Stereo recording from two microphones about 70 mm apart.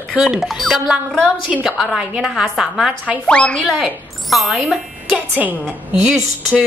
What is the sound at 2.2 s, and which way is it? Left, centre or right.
Speech, centre.